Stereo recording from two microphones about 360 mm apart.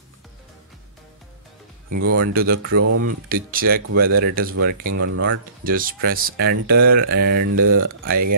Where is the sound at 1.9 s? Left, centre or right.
Right.